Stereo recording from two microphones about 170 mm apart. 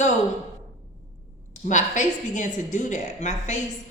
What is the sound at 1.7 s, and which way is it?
A woman's voice, 45° left (ahead or behind).